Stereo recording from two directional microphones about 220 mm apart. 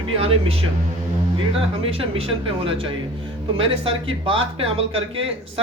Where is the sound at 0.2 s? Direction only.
25° right (ahead or behind).